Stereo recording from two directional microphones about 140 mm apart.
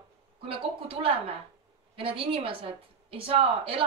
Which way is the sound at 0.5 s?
40° right (ahead or behind).